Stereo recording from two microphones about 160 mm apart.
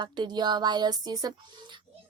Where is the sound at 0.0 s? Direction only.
25° right (ahead or behind).